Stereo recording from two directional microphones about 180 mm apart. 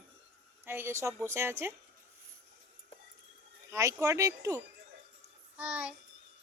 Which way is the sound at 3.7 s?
15° right (ahead or behind).